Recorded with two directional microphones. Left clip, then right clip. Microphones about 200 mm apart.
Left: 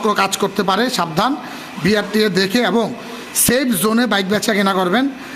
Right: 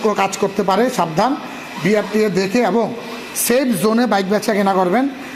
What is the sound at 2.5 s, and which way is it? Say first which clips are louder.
Speech: right 1 dB; 35° left (ahead or behind).